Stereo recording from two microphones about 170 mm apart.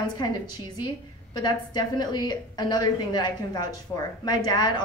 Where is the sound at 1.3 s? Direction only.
25° left (ahead or behind).